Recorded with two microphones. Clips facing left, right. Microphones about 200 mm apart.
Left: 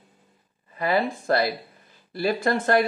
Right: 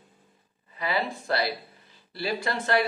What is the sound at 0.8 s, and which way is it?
Speech, 50° left (ahead or behind).